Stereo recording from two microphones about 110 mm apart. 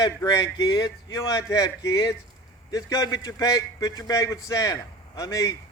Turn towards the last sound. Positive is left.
turn(degrees=30)  # may be behind; listen again after turning